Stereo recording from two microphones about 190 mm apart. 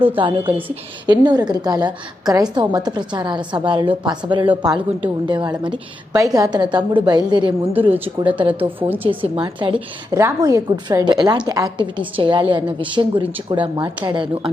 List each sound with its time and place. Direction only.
0.2 s a woman's voice: 25° right (ahead or behind)
7.7 s a woman's voice: 10° right (ahead or behind)
9.0 s a woman's voice: 30° right (ahead or behind)